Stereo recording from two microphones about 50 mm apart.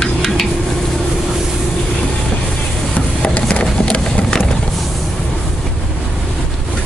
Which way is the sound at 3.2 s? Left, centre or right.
Left.